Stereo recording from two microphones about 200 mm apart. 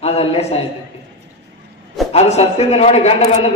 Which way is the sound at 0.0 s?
30° left (ahead or behind).